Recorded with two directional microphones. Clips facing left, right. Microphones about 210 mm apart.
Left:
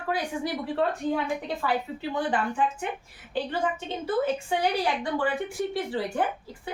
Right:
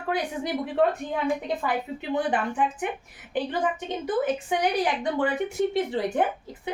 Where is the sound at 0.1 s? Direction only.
20° right (ahead or behind).